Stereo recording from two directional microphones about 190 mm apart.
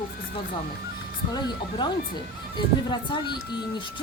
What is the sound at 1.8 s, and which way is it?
Speech, 25° left (ahead or behind).